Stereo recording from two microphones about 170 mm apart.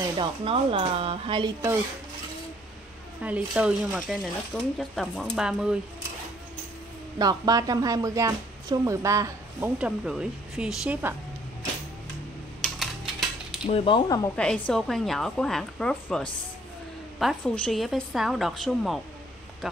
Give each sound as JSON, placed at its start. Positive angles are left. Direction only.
{"t": 0.0, "sound": "speech", "side_deg": -30}
{"t": 3.2, "sound": "a woman's voice", "side_deg": -10}
{"t": 7.2, "sound": "speech", "side_deg": -20}
{"t": 9.8, "sound": "a woman's voice", "side_deg": -5}
{"t": 12.6, "sound": "mechanisms", "side_deg": 0}
{"t": 13.7, "sound": "speech", "side_deg": 30}
{"t": 14.3, "sound": "a woman's voice", "side_deg": 5}